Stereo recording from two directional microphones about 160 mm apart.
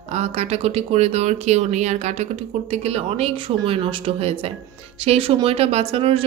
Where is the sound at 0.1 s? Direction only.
40° right (ahead or behind).